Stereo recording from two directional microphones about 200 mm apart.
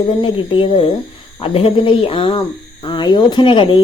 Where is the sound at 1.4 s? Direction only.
30° left (ahead or behind).